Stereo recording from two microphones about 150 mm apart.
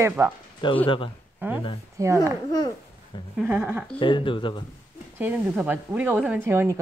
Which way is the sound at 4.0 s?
35° left (ahead or behind).